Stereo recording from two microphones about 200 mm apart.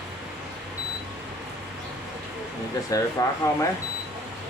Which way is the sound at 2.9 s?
15° left (ahead or behind).